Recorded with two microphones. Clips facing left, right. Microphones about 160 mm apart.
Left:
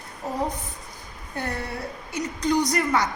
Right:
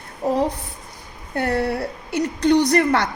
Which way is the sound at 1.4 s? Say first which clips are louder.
Right 9 dB; 70° right (ahead or behind).